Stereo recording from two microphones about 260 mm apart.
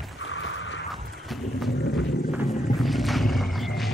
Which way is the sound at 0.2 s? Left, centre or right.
Left.